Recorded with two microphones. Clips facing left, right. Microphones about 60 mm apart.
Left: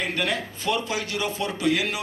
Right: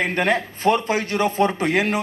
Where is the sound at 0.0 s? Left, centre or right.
Right.